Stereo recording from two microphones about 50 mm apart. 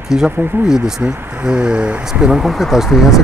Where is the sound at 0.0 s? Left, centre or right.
Centre.